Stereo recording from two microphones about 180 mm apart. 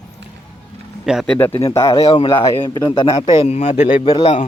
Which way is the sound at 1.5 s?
30° left (ahead or behind).